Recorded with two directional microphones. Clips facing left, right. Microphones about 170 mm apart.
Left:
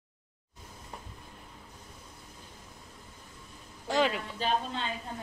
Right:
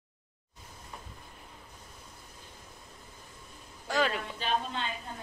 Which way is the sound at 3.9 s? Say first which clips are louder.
Left 2 dB; 20° left (ahead or behind).